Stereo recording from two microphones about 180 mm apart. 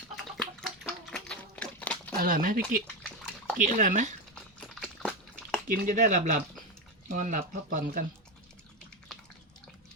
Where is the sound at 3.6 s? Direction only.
45° right (ahead or behind).